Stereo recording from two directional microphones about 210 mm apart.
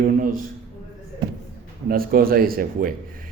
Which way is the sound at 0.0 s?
40° right (ahead or behind).